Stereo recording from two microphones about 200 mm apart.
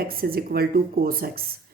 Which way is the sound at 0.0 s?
50° right (ahead or behind).